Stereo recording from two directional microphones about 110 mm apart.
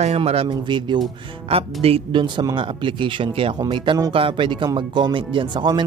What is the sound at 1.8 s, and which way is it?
Speech, 55° right (ahead or behind).